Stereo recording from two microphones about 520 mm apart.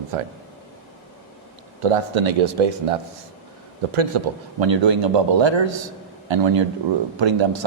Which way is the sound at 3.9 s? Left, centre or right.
Right.